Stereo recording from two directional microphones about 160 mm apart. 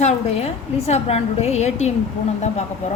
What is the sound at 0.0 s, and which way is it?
A woman's voice, 40° left (ahead or behind).